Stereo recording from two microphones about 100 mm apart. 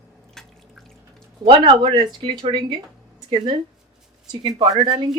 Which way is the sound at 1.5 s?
65° right (ahead or behind).